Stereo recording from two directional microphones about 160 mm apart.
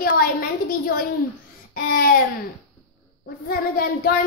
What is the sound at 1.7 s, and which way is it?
Speech, 65° left (ahead or behind).